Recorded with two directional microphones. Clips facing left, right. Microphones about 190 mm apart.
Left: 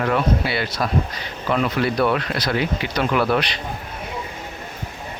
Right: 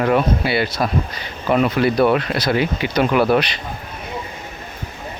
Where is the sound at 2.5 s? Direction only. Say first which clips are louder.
Right 4 dB; 10° right (ahead or behind).